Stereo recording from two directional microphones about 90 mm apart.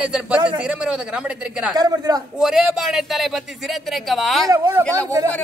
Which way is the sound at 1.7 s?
45° right (ahead or behind).